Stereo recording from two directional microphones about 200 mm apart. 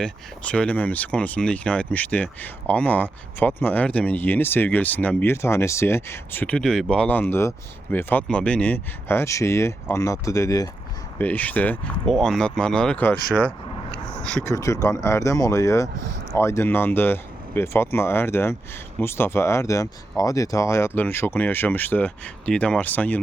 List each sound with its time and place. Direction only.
0.0 s speech: 5° left (ahead or behind)
13.9 s a sound: 5° left (ahead or behind)
14.4 s speech: 15° left (ahead or behind)